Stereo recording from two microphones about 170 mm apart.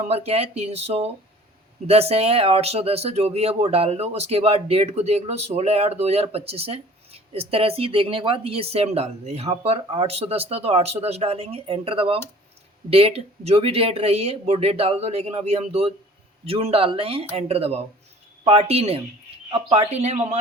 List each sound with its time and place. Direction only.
0.0 s speech: 40° right (ahead or behind)